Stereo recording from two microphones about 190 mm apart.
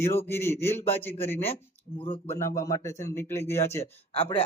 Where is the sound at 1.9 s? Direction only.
30° left (ahead or behind).